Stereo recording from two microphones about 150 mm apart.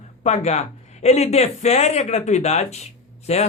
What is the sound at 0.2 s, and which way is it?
Speech, 50° left (ahead or behind).